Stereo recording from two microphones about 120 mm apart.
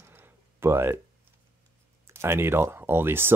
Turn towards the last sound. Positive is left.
turn(degrees=-20)  # may be behind; listen again after turning